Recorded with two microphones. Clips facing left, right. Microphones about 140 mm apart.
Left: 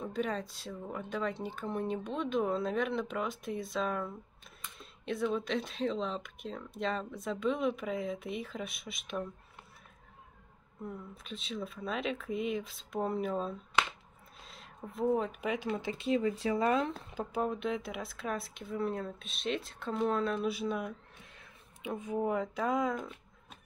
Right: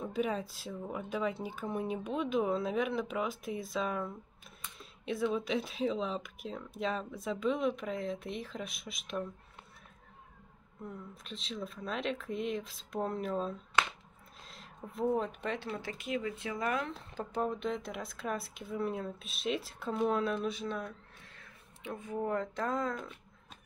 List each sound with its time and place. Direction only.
0.0 s speech: 5° right (ahead or behind)
10.8 s speech: centre (ahead or behind); by 16.9 s 25° left (ahead or behind)
17.1 s speech: 5° left (ahead or behind)
20.4 s speech: 10° left (ahead or behind)